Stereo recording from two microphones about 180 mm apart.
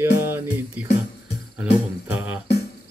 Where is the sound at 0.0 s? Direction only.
10° right (ahead or behind).